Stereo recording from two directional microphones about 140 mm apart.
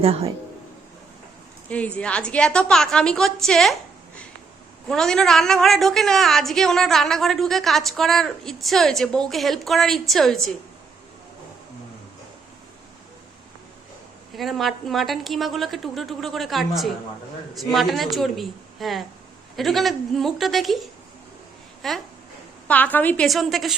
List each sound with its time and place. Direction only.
0.0 s a man's voice: 45° right (ahead or behind)
1.7 s a woman's voice: 10° left (ahead or behind)
4.9 s a woman's voice: 5° left (ahead or behind)
14.3 s a woman's voice: centre (ahead or behind)
22.6 s a woman's voice: 10° left (ahead or behind)
23.2 s a woman's voice: centre (ahead or behind)